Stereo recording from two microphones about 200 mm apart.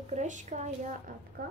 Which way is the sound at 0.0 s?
35° right (ahead or behind).